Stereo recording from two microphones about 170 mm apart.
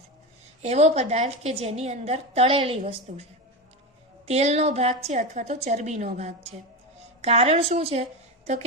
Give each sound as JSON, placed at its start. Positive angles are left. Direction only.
{"t": 0.6, "sound": "a woman's voice", "side_deg": -40}
{"t": 4.3, "sound": "a woman's voice", "side_deg": -40}